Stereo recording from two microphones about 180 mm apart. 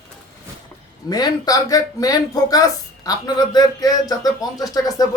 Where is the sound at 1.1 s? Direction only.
20° left (ahead or behind).